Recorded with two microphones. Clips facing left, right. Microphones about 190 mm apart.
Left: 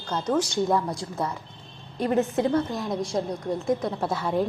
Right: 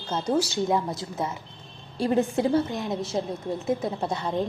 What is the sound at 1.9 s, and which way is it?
Speech, 30° right (ahead or behind).